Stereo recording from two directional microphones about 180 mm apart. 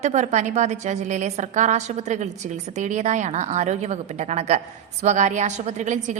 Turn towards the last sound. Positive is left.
turn(degrees=-40)  # may be behind; listen again after turning